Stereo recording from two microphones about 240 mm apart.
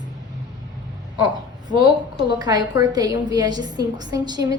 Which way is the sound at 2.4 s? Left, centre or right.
Centre.